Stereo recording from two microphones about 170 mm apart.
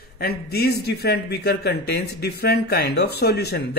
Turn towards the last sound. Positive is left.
turn(degrees=70)  # may be behind; listen again after turning